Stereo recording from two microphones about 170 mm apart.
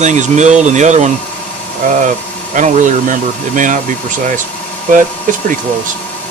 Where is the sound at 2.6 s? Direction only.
45° right (ahead or behind).